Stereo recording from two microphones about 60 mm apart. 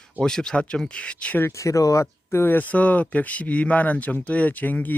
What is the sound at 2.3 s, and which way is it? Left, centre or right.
Speech, left.